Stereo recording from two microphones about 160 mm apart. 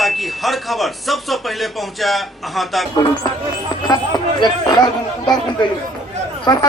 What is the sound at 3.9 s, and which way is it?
Speech, 25° left (ahead or behind).